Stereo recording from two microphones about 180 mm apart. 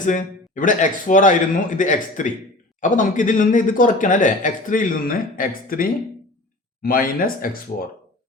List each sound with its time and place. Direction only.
0.0 s speech: 45° left (ahead or behind)